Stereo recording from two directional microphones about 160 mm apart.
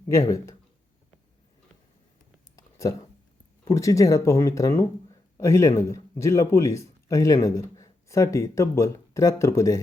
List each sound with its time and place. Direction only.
0.1 s speech: 20° left (ahead or behind)
2.6 s a sound: 20° left (ahead or behind)
3.6 s speech: 20° left (ahead or behind)